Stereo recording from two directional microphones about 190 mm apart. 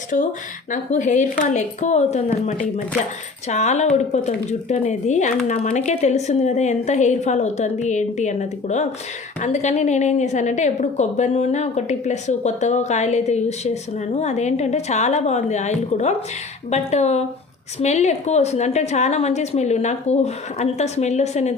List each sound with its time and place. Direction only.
0.1 s a woman's voice: 40° left (ahead or behind)